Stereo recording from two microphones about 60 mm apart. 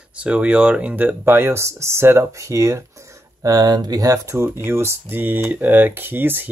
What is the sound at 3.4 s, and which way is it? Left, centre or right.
Speech, right.